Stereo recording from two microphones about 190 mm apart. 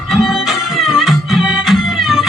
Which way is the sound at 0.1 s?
Centre (ahead or behind).